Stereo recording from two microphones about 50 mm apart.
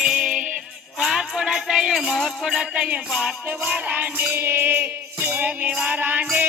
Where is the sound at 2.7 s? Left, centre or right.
Right.